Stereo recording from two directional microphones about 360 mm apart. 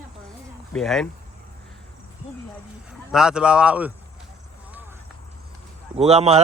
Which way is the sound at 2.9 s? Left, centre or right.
Centre.